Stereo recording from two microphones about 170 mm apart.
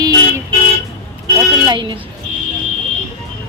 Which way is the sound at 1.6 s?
30° right (ahead or behind).